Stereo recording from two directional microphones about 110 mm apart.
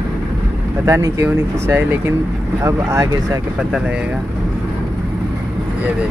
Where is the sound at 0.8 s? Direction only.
25° right (ahead or behind).